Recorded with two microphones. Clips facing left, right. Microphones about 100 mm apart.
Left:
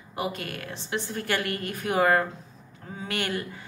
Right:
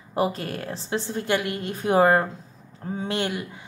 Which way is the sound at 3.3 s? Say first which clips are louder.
Even; 15° right (ahead or behind).